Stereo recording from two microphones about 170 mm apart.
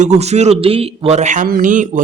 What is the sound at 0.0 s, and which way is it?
A man's voice, 40° right (ahead or behind).